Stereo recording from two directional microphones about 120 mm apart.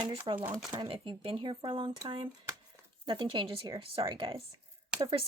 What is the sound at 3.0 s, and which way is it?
A woman's voice, 40° right (ahead or behind).